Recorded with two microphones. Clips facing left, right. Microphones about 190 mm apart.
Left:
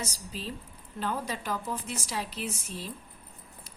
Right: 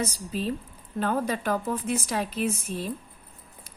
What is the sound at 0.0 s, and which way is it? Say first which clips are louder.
A woman's voice: right 9 dB; 55° right (ahead or behind).